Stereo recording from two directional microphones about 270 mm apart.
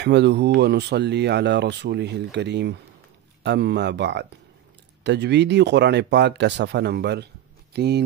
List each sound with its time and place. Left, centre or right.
0.0 s speech: right